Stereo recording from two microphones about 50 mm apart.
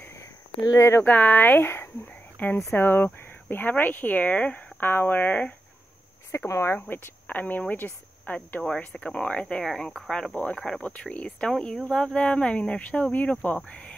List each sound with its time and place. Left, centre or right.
0.7 s speech: left
1.0 s speech: left
2.3 s speech: left
4.7 s speech: left
6.3 s speech: left
6.9 s speech: left
8.6 s speech: centre
9.6 s speech: centre
10.3 s speech: left
11.3 s speech: centre
13.7 s cricket: left